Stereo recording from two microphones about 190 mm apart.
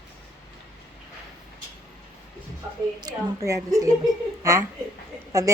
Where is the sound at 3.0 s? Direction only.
20° right (ahead or behind).